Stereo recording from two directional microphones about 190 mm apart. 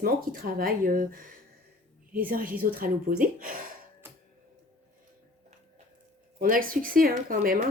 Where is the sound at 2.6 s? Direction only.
50° right (ahead or behind).